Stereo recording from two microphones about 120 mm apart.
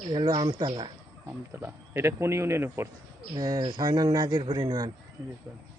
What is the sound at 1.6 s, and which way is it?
Speech, 20° right (ahead or behind).